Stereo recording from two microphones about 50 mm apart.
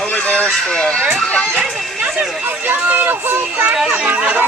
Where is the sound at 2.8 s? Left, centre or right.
Right.